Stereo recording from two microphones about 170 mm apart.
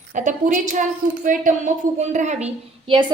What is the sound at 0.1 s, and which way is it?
A woman's voice, 50° right (ahead or behind).